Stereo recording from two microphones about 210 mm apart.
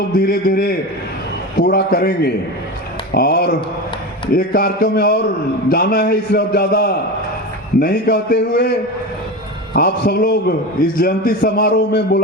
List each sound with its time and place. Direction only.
0.1 s a man's voice: 45° left (ahead or behind)
9.7 s a man's voice: 45° left (ahead or behind)